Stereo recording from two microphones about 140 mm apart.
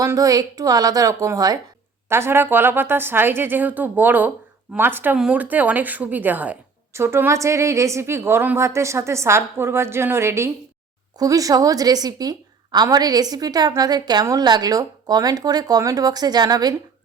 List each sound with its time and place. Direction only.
0.0 s a woman's voice: 25° right (ahead or behind)